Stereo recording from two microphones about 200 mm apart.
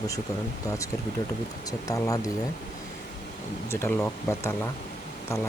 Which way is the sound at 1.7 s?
15° left (ahead or behind).